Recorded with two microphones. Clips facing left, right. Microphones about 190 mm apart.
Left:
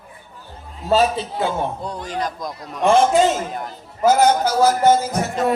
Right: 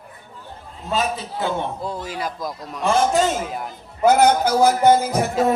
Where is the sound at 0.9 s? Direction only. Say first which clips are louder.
Left 6 dB; 35° left (ahead or behind).